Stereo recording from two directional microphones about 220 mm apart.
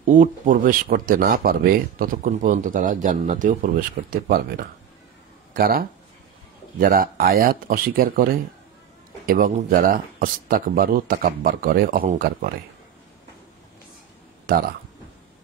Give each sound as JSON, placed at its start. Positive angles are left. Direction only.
{"t": 0.0, "sound": "speech", "side_deg": -35}
{"t": 14.4, "sound": "speech", "side_deg": -40}